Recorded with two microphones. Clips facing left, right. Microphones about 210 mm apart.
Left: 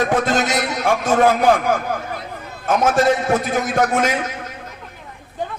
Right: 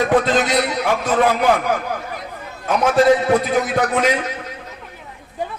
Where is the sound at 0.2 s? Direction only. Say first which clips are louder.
Right 1 dB; 45° left (ahead or behind).